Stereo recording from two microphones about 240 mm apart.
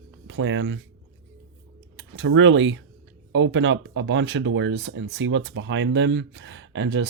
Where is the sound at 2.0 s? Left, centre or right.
Right.